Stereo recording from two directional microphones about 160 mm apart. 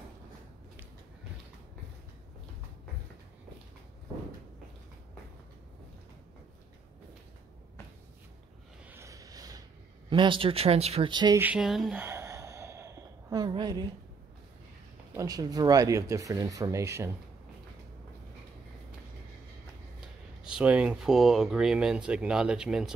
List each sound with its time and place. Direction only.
8.8 s a sound: 15° right (ahead or behind)
10.0 s speech: 30° right (ahead or behind)
11.3 s speech: 10° right (ahead or behind)
12.0 s sigh: 15° right (ahead or behind)
15.1 s speech: 25° right (ahead or behind)
20.4 s speech: 5° right (ahead or behind)